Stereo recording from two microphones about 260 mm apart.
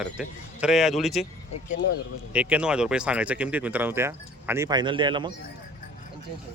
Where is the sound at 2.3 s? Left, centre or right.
Centre.